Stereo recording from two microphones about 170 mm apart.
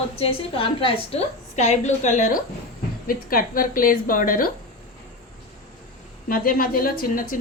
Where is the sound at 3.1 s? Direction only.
55° left (ahead or behind).